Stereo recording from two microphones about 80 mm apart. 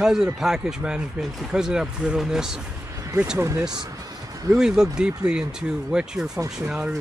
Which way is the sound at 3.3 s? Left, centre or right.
Right.